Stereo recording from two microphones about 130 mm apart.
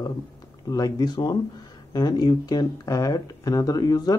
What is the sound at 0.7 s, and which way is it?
Speech, 30° left (ahead or behind).